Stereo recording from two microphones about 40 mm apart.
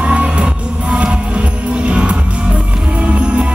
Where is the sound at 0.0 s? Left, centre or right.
Right.